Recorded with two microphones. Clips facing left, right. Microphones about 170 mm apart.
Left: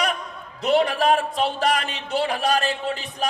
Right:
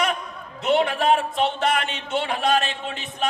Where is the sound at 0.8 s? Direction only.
35° left (ahead or behind).